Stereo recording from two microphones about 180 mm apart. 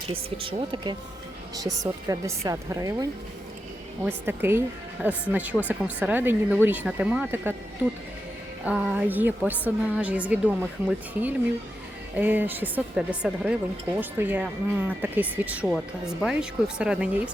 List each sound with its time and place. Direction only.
0.3 s a woman's voice: 30° right (ahead or behind)
1.8 s a woman's voice: 15° right (ahead or behind)
8.6 s speech: 10° right (ahead or behind)